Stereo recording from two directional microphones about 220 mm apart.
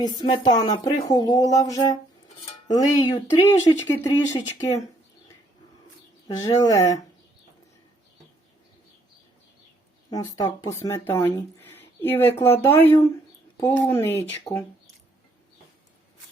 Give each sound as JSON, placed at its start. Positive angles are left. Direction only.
{"t": 0.0, "sound": "speech", "side_deg": 20}
{"t": 6.2, "sound": "speech", "side_deg": 15}
{"t": 10.1, "sound": "speech", "side_deg": 15}